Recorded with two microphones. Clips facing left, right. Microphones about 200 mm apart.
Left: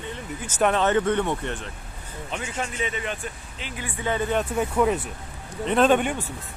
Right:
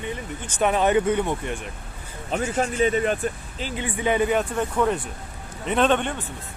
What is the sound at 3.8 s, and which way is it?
Speech, 15° right (ahead or behind).